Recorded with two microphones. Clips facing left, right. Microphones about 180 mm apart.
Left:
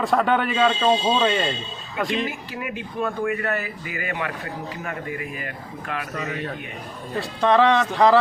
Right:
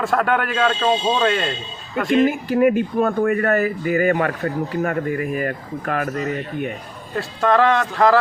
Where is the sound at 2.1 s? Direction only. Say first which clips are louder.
Right 11 dB; 45° right (ahead or behind).